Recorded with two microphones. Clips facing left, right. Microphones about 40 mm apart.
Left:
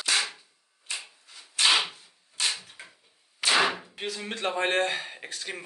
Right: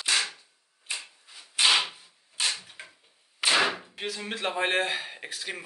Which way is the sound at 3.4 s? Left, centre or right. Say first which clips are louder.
Even; centre.